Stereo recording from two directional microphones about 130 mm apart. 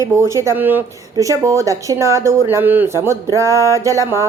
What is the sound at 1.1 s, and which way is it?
A woman's voice, 25° right (ahead or behind).